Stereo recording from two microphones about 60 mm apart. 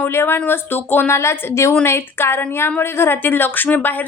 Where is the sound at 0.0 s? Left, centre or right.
Left.